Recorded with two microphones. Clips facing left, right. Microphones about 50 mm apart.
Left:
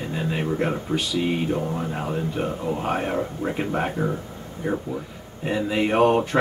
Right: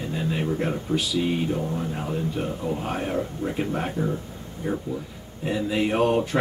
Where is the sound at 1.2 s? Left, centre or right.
Centre.